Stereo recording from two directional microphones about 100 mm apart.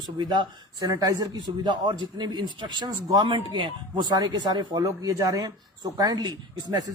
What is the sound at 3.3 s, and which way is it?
Speech, 55° right (ahead or behind).